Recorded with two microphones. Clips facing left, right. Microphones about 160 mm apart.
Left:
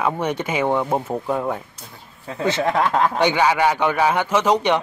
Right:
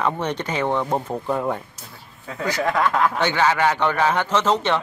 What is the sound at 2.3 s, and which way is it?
Speech, 25° left (ahead or behind).